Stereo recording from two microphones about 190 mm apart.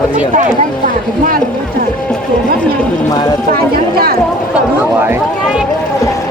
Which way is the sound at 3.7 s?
50° right (ahead or behind).